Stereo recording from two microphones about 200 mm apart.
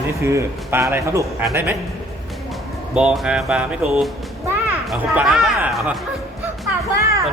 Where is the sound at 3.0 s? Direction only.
5° right (ahead or behind).